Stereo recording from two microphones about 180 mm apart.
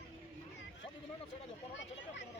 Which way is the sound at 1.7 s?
85° left.